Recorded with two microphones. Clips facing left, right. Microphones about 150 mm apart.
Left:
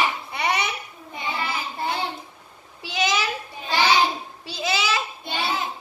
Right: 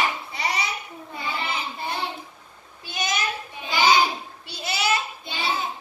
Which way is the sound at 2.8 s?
90° left.